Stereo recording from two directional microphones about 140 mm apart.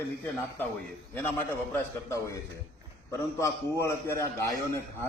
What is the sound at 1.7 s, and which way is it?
Speech, 20° left (ahead or behind).